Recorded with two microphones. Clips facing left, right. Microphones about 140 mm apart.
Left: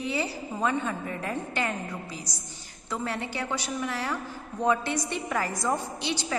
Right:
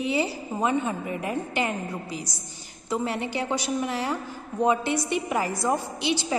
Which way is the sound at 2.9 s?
15° right (ahead or behind).